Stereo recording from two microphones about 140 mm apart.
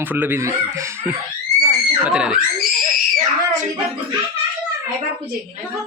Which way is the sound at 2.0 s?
5° right (ahead or behind).